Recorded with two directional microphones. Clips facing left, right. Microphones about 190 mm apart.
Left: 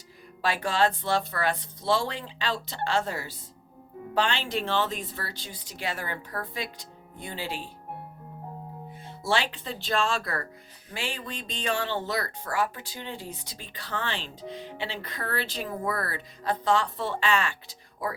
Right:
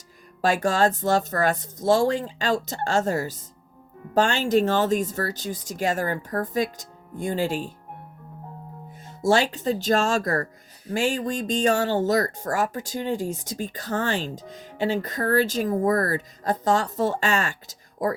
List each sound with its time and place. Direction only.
0.4 s speech: 45° right (ahead or behind)
9.0 s speech: 45° right (ahead or behind)